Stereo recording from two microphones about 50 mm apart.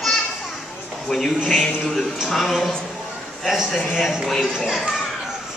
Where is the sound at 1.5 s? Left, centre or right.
Centre.